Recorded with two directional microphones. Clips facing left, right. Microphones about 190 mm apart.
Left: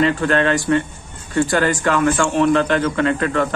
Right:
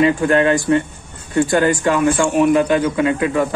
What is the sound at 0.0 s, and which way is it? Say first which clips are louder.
A man's voice: right 3 dB; 15° right (ahead or behind).